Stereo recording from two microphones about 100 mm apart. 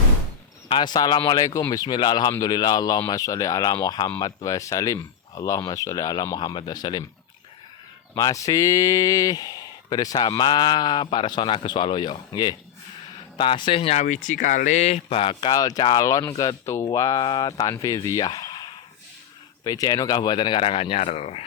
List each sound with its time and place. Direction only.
0.7 s speech: 45° left (ahead or behind)
8.1 s speech: 35° left (ahead or behind); by 13.9 s 70° left (ahead or behind)
14.8 s speech: 90° left; by 15.4 s 65° left (ahead or behind)
15.4 s speech: 40° left (ahead or behind)
17.2 s speech: 50° left (ahead or behind)
18.3 s a sound: 50° left (ahead or behind)
19.6 s speech: 40° left (ahead or behind); by 21.4 s 90° left